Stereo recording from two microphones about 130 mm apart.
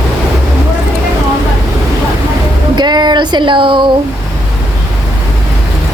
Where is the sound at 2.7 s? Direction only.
35° right (ahead or behind).